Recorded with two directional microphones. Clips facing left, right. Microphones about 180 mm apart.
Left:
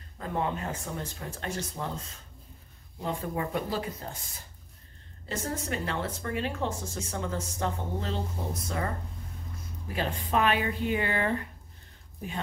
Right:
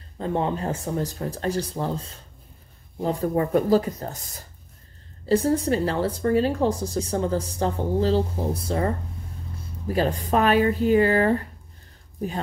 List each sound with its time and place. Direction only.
0.2 s speech: 30° right (ahead or behind)